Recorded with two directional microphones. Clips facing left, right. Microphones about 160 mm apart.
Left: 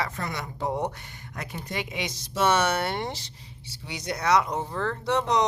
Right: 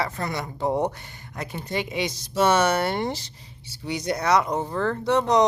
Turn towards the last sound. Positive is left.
turn(degrees=-45)  # may be behind; listen again after turning